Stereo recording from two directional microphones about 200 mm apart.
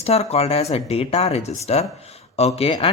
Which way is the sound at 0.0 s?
30° left (ahead or behind).